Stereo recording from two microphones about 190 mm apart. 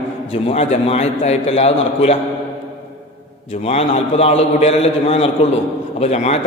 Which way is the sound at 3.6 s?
35° left (ahead or behind).